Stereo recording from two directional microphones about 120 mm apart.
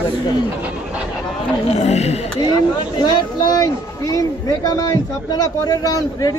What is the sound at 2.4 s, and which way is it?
Speech, 40° left (ahead or behind).